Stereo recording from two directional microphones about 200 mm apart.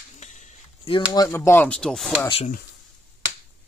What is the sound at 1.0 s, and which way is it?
Speech, 15° left (ahead or behind).